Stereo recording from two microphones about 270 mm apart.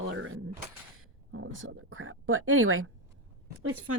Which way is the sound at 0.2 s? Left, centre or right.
Right.